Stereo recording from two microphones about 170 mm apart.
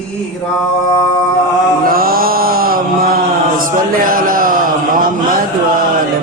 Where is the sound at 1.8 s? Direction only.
60° right (ahead or behind).